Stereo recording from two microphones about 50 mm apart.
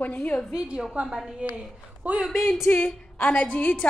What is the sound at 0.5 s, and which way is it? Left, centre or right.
Speech, centre.